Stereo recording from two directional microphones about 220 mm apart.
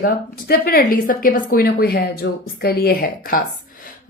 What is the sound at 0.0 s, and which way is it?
Speech, 45° left (ahead or behind).